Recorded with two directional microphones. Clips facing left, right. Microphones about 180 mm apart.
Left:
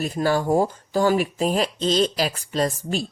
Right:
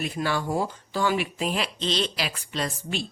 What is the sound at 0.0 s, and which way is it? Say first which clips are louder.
Speech: left 6 dB; 40° left (ahead or behind).